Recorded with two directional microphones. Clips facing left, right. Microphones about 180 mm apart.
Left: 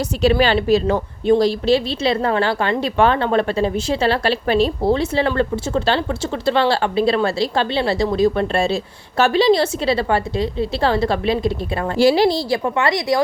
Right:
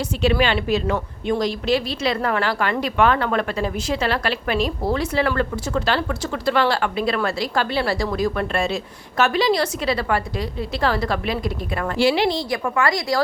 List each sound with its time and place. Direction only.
0.2 s speech: 35° left (ahead or behind)
11.9 s speech: 40° left (ahead or behind)
12.6 s speech: 25° left (ahead or behind)